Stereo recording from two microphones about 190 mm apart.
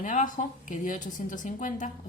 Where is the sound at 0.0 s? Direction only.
45° left (ahead or behind).